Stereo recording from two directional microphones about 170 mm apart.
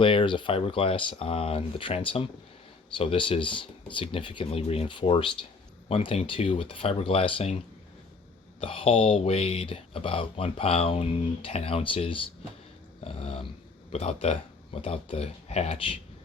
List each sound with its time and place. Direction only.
0.0 s speech: 30° left (ahead or behind)
8.6 s speech: 35° left (ahead or behind)